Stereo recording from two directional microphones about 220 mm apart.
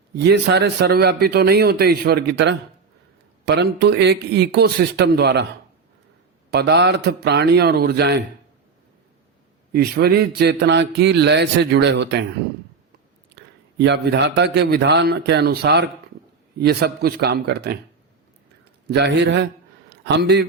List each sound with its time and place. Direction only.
0.2 s a man's voice: 50° right (ahead or behind)
6.5 s a man's voice: 50° right (ahead or behind)
9.7 s a man's voice: 45° right (ahead or behind)
13.3 s a man's voice: 50° right (ahead or behind)
18.9 s a man's voice: 50° right (ahead or behind)